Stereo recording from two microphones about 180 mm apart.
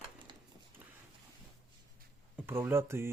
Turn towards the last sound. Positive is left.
turn(degrees=-15)  # may be behind; listen again after turning